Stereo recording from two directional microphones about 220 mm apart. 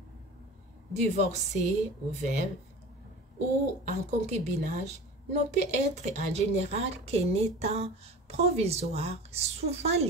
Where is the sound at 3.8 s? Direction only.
30° right (ahead or behind).